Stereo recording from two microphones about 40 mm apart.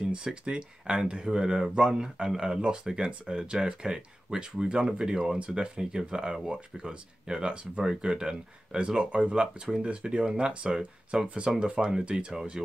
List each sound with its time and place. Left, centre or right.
0.1 s speech: right
12.6 s speech: centre